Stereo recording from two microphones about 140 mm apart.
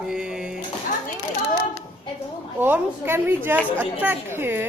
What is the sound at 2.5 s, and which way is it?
A woman's voice, 15° right (ahead or behind).